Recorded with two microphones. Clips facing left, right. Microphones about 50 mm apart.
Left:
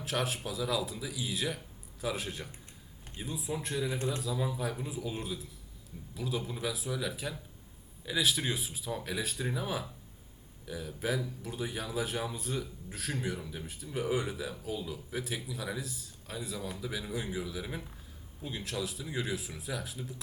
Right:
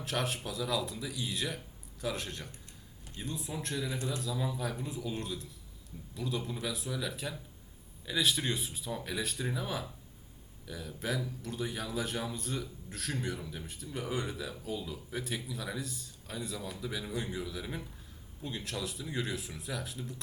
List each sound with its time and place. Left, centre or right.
0.0 s speech: centre
3.9 s a man's voice: left
4.2 s speech: centre